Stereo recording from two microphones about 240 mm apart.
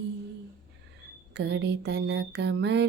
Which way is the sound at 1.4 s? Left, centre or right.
Right.